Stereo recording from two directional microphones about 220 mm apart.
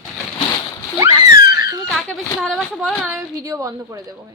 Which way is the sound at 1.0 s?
15° right (ahead or behind).